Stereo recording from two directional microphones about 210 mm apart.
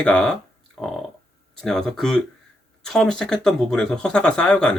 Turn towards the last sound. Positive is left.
turn(degrees=5)  # may be behind; listen again after turning